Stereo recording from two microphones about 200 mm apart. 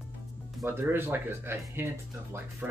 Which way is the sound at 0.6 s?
10° right (ahead or behind).